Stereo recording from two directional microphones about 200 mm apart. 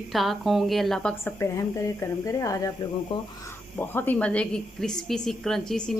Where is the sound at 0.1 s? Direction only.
Centre (ahead or behind); by 3.3 s 25° left (ahead or behind).